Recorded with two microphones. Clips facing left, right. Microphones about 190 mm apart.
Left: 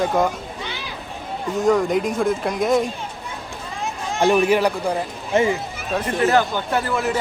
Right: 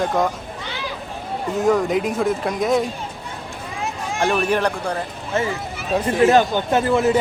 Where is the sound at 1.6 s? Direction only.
Centre (ahead or behind).